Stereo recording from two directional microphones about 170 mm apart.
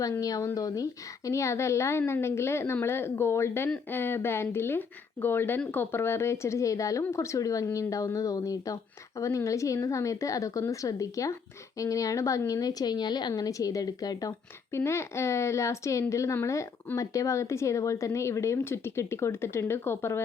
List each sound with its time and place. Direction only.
0.0 s a woman's voice: 20° left (ahead or behind)